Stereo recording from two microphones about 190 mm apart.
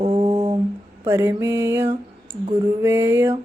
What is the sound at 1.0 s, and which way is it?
Speech, 15° right (ahead or behind).